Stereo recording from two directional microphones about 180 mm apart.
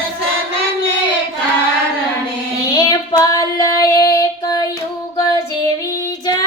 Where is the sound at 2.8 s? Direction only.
20° left (ahead or behind).